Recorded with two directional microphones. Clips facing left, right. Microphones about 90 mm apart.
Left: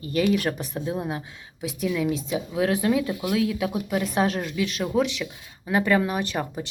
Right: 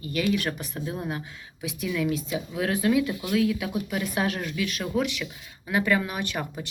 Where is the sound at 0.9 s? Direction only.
20° left (ahead or behind).